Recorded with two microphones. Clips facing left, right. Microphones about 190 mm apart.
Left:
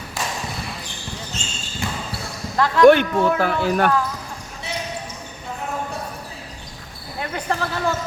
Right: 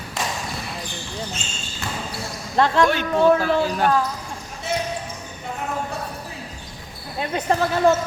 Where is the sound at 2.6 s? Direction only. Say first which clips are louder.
Right 2 dB; 25° right (ahead or behind).